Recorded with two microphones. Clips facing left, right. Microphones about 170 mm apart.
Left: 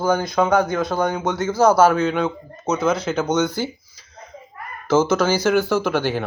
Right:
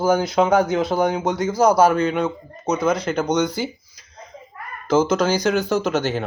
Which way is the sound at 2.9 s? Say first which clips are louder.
Even; 5° left (ahead or behind).